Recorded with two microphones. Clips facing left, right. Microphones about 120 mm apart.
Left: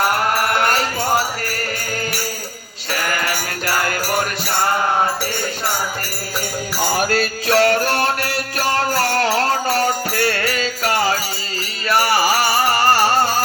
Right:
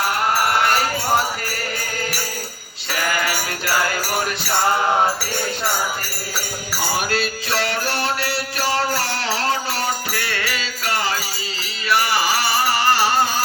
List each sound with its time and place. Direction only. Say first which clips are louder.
7.0 s music: left 4 dB; 45° left (ahead or behind)